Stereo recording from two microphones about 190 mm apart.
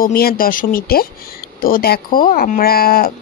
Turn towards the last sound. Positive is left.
turn(degrees=50)  # may be behind; listen again after turning